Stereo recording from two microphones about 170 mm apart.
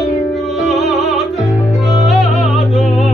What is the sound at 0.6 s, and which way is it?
Music, centre (ahead or behind).